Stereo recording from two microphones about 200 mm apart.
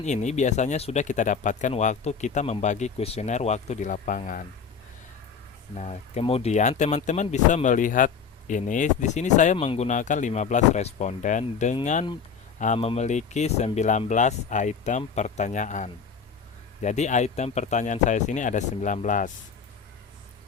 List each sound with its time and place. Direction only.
0.0 s speech: 35° left (ahead or behind)
5.7 s speech: 35° left (ahead or behind)